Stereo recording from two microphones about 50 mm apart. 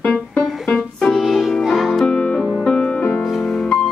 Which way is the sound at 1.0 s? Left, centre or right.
Centre.